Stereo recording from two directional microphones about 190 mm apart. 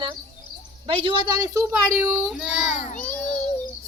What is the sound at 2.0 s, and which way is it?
Child singing, 5° right (ahead or behind).